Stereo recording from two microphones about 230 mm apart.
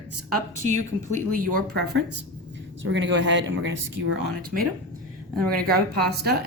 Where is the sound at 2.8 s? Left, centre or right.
Right.